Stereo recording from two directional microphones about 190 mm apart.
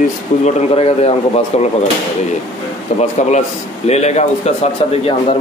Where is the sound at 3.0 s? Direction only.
35° left (ahead or behind).